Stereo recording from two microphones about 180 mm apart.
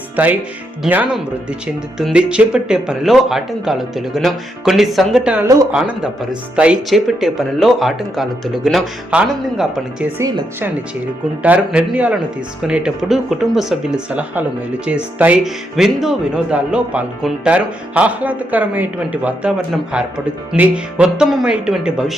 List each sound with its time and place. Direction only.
0.2 s speech: 10° right (ahead or behind)
10.2 s speech: 15° right (ahead or behind)